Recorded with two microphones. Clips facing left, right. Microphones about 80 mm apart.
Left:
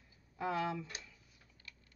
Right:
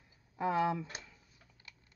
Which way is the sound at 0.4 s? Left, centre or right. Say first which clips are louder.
Right 5 dB; right.